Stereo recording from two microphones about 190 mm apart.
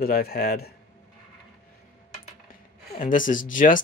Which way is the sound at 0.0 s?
55° left (ahead or behind).